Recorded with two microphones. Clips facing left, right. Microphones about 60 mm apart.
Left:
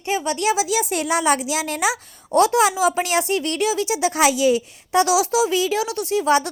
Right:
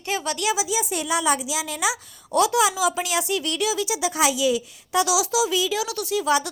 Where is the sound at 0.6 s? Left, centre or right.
Left.